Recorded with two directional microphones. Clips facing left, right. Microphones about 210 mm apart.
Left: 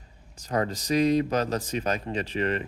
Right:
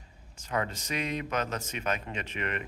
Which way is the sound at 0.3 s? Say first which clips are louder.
Left 5 dB; 35° left (ahead or behind).